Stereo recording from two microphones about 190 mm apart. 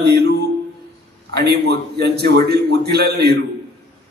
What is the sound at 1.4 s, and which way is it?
A man's voice, 60° right (ahead or behind).